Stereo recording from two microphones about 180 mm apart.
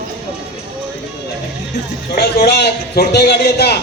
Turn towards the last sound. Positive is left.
turn(degrees=65)  # may be behind; listen again after turning